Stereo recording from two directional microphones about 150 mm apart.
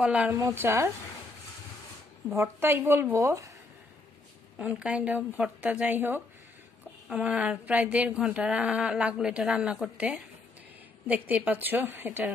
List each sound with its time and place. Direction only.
0.0 s speech: 10° right (ahead or behind)
0.4 s speech: 20° right (ahead or behind)
2.2 s speech: 15° right (ahead or behind)
4.6 s speech: 10° right (ahead or behind)